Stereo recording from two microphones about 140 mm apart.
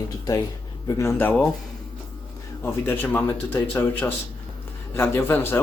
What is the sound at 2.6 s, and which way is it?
A man's voice, 15° left (ahead or behind).